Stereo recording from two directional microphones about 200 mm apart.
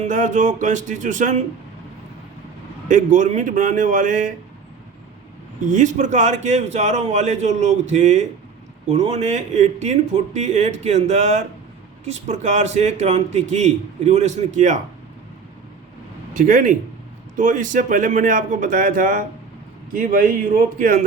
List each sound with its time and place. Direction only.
0.0 s a man's voice: 40° right (ahead or behind)
2.9 s a man's voice: 40° right (ahead or behind)
5.5 s a man's voice: 40° right (ahead or behind)
16.3 s a man's voice: 40° right (ahead or behind)